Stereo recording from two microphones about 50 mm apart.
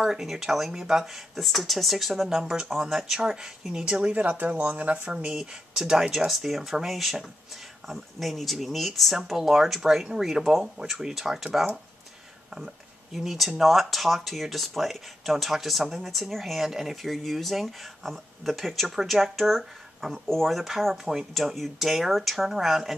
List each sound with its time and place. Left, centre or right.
0.0 s speech: centre
6.1 s speech: centre
13.1 s speech: centre